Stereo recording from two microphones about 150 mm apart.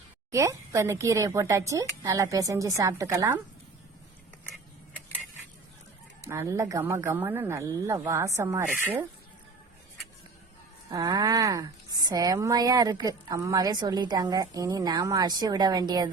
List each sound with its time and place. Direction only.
0.3 s a woman's voice: 20° right (ahead or behind)
6.2 s a woman's voice: 20° right (ahead or behind)
10.9 s a woman's voice: 25° right (ahead or behind)